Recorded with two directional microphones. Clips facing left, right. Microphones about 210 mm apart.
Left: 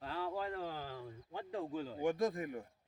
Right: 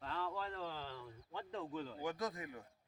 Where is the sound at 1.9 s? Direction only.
25° left (ahead or behind).